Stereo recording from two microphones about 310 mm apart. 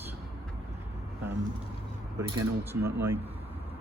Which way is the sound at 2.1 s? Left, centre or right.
Centre.